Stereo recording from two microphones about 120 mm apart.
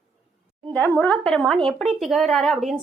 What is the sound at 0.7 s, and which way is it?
Speech, 15° left (ahead or behind).